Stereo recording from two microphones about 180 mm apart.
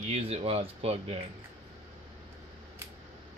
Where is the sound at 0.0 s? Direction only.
35° right (ahead or behind).